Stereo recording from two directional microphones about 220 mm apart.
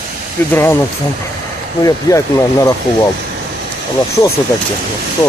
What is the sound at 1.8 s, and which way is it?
Speech, 15° left (ahead or behind).